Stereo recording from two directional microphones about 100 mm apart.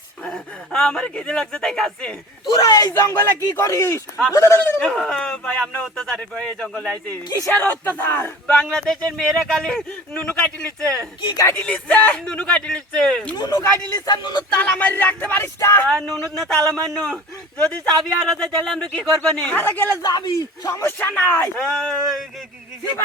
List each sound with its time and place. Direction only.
0.3 s speech: 5° left (ahead or behind)
2.5 s speech: 40° left (ahead or behind)
2.9 s speech: 25° left (ahead or behind)
4.8 s speech: 10° left (ahead or behind)
7.5 s speech: 20° left (ahead or behind)
8.4 s speech: 5° left (ahead or behind)
13.3 s speech: 35° left (ahead or behind)
14.5 s speech: 15° left (ahead or behind)
15.9 s speech: 5° left (ahead or behind)
17.6 s speech: 5° left (ahead or behind)
20.0 s speech: 45° left (ahead or behind)
20.8 s speech: 15° left (ahead or behind)
21.6 s speech: 5° left (ahead or behind)